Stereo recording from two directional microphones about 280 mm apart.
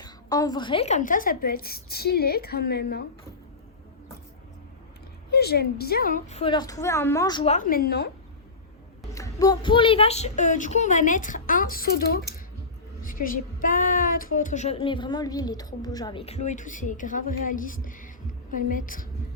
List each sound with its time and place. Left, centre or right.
0.0 s a woman's voice: centre; by 3.0 s left
5.3 s a woman's voice: left
9.1 s a woman's voice: centre; by 19.0 s left